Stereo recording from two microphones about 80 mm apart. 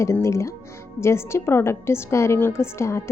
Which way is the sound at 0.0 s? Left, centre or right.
Left.